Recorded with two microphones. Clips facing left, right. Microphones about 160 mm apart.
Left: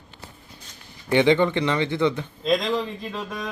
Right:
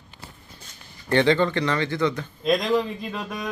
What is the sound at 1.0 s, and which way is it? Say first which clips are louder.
A man's voice: left 1 dB; 15° left (ahead or behind).